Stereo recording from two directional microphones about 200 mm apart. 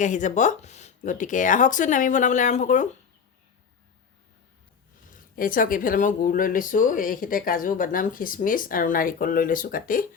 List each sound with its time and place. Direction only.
0.0 s speech: 40° left (ahead or behind)
5.1 s speech: 45° left (ahead or behind)